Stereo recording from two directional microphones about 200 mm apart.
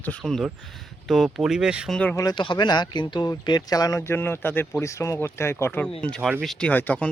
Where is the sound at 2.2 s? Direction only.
25° left (ahead or behind).